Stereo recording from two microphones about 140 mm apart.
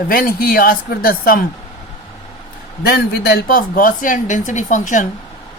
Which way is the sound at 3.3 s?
90° left.